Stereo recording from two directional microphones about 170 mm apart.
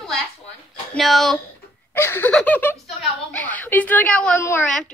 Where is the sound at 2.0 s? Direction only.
15° left (ahead or behind).